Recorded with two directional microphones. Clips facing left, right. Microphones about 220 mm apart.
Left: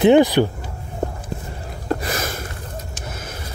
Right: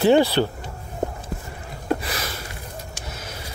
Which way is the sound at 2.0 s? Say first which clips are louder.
Left 5 dB; 45° left (ahead or behind).